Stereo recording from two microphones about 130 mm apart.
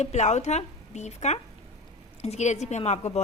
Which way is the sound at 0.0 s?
60° left (ahead or behind).